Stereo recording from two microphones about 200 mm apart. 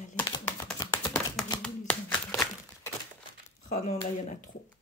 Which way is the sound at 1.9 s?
5° left (ahead or behind).